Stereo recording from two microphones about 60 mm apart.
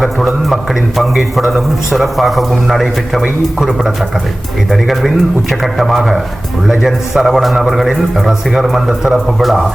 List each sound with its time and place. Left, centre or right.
0.0 s a man's voice: centre